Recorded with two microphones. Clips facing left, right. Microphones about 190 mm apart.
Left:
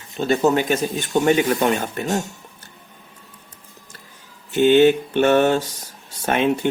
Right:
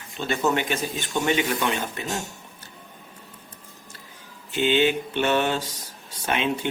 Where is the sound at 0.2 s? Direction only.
40° left (ahead or behind).